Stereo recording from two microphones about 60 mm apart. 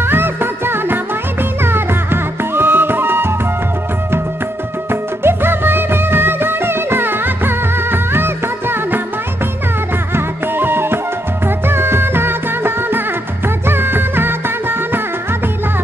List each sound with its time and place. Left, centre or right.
0.0 s music: right
5.2 s music: right
10.1 s music: right